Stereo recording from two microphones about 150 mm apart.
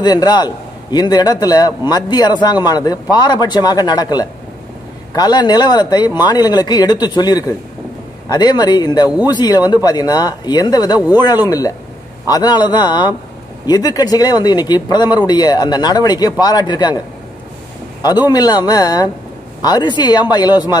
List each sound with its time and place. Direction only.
0.0 s a man's voice: 25° left (ahead or behind)
18.3 s a man's voice: 25° left (ahead or behind)